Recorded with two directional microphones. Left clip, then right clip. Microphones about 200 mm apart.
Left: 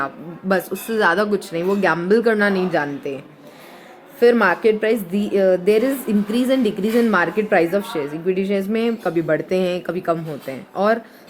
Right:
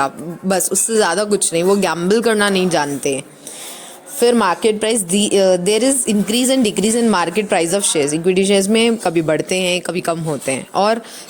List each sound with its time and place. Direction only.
0.0 s a woman's voice: 25° right (ahead or behind)
4.2 s a woman's voice: 30° right (ahead or behind)